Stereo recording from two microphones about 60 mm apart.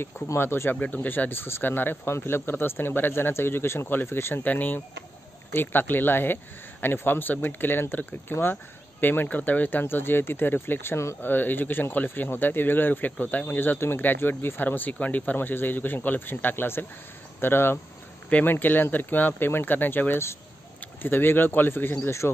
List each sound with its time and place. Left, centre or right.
0.0 s speech: left
0.7 s speech: left
4.5 s speech: left
11.2 s speech: left
15.3 s speech: left